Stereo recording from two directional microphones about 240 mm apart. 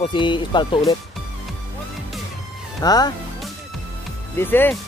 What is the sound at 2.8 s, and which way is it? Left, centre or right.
Speech, centre.